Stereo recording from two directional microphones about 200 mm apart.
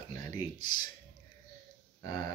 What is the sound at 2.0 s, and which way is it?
Speech, 20° left (ahead or behind).